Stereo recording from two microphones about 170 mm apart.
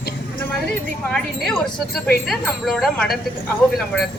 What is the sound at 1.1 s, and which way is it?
Speech, centre (ahead or behind).